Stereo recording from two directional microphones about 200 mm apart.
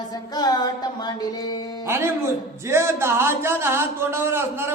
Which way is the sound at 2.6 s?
10° right (ahead or behind).